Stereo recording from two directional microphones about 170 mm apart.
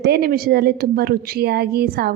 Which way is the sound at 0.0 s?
65° right (ahead or behind).